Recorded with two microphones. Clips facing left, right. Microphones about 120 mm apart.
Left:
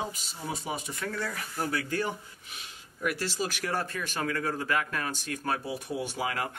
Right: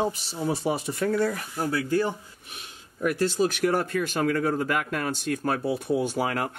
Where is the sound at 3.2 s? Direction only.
50° right (ahead or behind).